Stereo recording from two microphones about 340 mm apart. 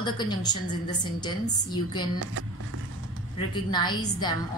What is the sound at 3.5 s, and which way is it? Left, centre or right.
Speech, centre.